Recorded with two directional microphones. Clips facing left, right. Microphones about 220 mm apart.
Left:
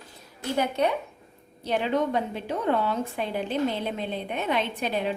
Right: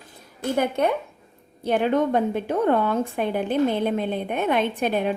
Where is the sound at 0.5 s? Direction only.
50° right (ahead or behind).